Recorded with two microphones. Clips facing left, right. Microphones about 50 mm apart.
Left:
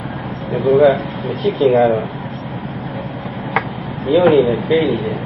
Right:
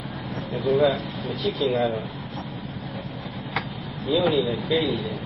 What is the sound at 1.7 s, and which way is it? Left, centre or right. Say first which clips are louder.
Speech: left 12 dB; left.